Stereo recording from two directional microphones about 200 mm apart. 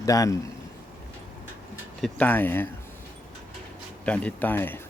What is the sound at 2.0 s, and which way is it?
Speech, 5° left (ahead or behind).